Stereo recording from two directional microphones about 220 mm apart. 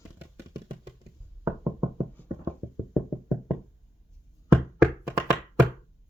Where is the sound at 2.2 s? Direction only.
10° left (ahead or behind).